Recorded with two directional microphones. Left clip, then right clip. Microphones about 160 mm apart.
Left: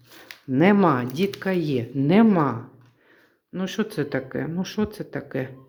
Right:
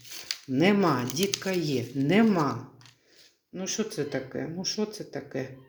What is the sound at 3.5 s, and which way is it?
Speech, 25° left (ahead or behind).